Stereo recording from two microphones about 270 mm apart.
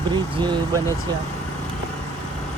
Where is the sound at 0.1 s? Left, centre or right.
Centre.